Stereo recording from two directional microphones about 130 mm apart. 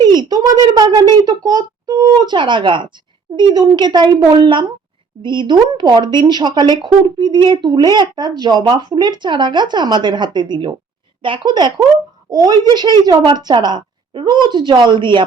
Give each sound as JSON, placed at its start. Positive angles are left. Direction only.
{"t": 0.0, "sound": "a woman's voice", "side_deg": -35}